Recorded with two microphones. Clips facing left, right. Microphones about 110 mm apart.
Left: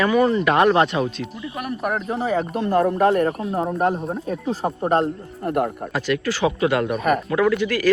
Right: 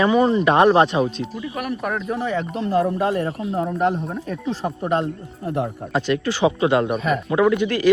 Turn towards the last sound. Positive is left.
turn(degrees=-20)  # may be behind; listen again after turning